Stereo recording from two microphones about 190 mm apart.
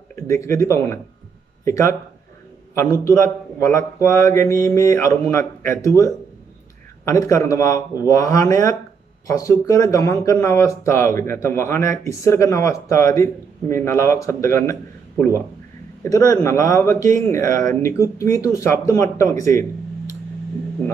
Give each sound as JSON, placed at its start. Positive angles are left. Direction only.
{"t": 0.1, "sound": "a man's voice", "side_deg": 15}